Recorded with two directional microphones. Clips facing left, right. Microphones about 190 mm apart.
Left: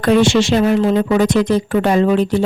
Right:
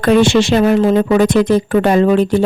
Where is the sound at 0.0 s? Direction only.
60° right (ahead or behind).